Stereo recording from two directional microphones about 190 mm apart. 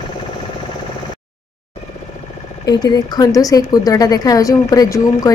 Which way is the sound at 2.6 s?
20° left (ahead or behind).